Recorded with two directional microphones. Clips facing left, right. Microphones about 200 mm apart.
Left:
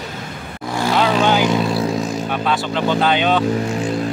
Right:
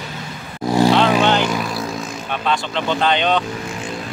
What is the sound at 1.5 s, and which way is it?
Vehicle, 30° left (ahead or behind).